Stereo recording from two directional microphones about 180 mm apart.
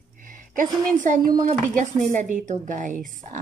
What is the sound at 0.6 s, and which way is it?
A woman's voice, 45° right (ahead or behind).